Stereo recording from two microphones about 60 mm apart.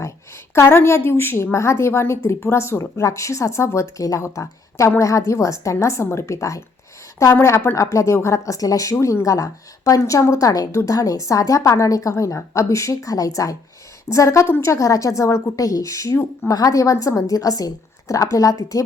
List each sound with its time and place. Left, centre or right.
0.5 s a woman's voice: left
7.8 s a woman's voice: left
10.0 s a woman's voice: left
12.1 s a woman's voice: left
14.1 s a woman's voice: left
14.4 s a woman's voice: left
14.7 s a woman's voice: left
16.5 s a woman's voice: left
18.1 s a woman's voice: left